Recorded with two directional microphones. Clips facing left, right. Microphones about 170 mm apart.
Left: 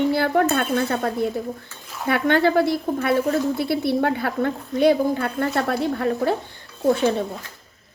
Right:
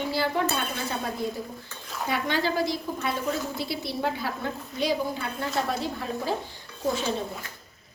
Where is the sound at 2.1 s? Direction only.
60° left (ahead or behind).